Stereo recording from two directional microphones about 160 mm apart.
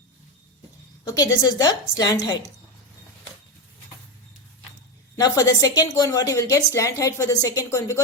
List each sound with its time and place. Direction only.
1.0 s a woman's voice: 25° left (ahead or behind)
5.1 s a woman's voice: 20° left (ahead or behind)